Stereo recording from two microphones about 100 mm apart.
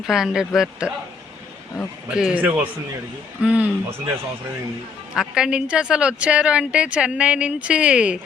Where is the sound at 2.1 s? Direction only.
10° right (ahead or behind).